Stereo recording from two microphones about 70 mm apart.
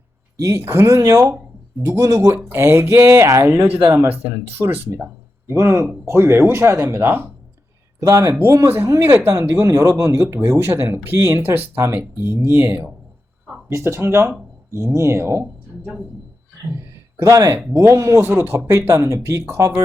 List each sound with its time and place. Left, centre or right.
0.4 s speech: right
1.8 s speech: right
4.1 s speech: right
8.0 s speech: right
8.5 s speech: right
9.6 s speech: right
13.7 s speech: right
15.8 s speech: centre
17.2 s speech: right